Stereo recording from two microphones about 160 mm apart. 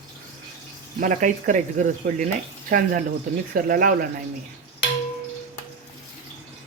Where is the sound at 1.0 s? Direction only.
55° right (ahead or behind).